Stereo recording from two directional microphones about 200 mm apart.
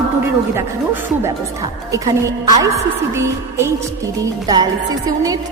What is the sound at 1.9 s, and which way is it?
A man's voice, 15° right (ahead or behind).